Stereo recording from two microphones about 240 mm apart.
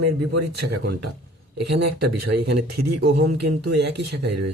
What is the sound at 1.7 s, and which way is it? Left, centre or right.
Speech, right.